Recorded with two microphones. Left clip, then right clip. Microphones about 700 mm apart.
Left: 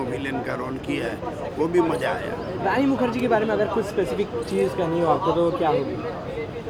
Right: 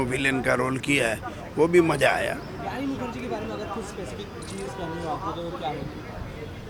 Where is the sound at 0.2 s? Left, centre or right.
Right.